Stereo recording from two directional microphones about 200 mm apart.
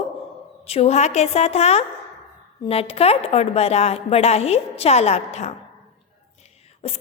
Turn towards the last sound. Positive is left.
turn(degrees=30)  # may be behind; listen again after turning